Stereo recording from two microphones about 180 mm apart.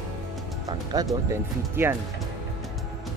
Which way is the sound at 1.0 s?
20° right (ahead or behind).